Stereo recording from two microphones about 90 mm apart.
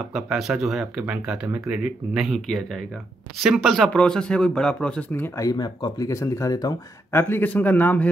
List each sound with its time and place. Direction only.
0.1 s speech: 5° right (ahead or behind); by 5.2 s 10° left (ahead or behind)
5.4 s speech: 50° left (ahead or behind)
7.1 s a man's voice: 25° left (ahead or behind)